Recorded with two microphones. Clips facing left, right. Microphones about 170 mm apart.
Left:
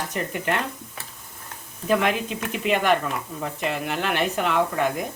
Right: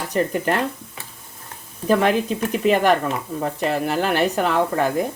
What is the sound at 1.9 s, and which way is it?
Speech, 35° right (ahead or behind).